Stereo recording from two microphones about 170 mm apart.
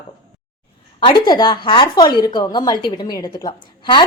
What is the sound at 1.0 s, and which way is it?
Speech, 25° left (ahead or behind).